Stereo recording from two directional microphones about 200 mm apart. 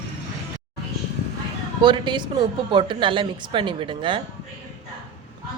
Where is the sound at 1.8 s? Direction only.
25° right (ahead or behind).